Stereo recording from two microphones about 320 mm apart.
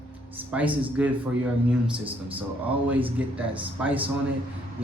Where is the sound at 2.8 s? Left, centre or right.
Centre.